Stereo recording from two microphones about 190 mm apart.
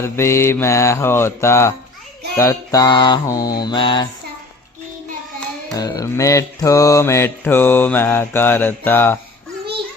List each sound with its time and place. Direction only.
0.0 s mantra: 15° left (ahead or behind)
2.3 s music: 15° left (ahead or behind)
5.7 s mantra: 20° left (ahead or behind)